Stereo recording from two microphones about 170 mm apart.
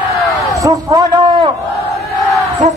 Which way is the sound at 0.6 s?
20° right (ahead or behind).